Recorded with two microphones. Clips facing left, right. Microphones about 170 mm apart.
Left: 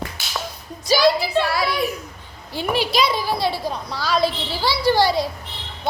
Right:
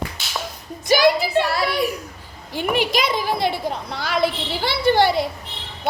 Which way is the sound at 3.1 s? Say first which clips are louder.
Right 1 dB; 15° right (ahead or behind).